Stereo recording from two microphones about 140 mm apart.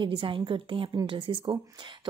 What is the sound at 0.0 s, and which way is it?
A woman's voice, 35° right (ahead or behind).